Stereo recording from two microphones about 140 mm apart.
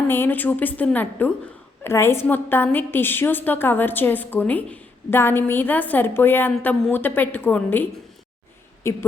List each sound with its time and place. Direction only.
0.1 s a woman's voice: 15° left (ahead or behind)